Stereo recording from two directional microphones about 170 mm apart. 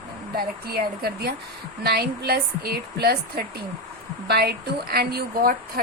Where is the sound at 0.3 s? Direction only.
60° right (ahead or behind).